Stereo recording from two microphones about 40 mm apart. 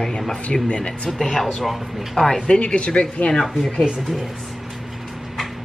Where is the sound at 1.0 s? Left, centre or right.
Centre.